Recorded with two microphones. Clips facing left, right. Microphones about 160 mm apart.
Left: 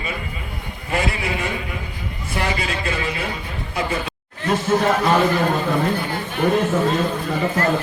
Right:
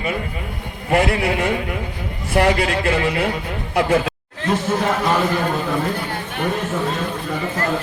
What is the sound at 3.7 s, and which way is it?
Speech, 85° right.